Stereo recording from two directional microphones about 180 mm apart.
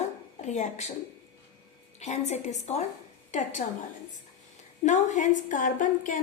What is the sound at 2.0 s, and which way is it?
A woman's voice, 40° left (ahead or behind).